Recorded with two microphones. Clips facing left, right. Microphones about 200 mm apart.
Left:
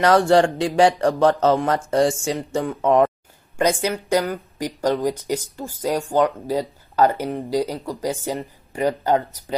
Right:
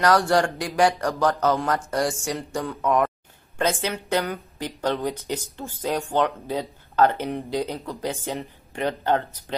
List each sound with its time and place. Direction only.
0.0 s speech: 25° left (ahead or behind); by 9.2 s 5° left (ahead or behind)